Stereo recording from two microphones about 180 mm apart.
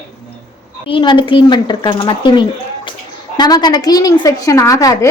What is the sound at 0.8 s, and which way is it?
A woman's voice, 30° left (ahead or behind).